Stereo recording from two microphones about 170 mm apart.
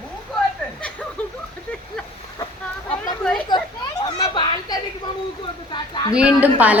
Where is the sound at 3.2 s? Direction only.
5° left (ahead or behind).